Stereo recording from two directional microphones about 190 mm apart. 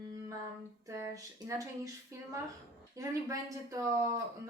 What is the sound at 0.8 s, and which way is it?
A woman's voice, 15° right (ahead or behind).